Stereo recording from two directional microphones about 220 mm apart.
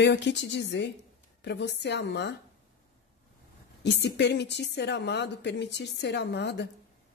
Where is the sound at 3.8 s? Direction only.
50° left (ahead or behind).